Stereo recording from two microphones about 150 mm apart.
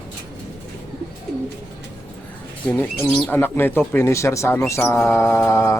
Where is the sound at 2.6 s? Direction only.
10° left (ahead or behind).